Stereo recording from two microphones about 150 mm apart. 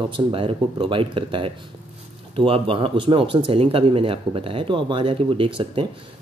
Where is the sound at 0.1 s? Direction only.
35° right (ahead or behind).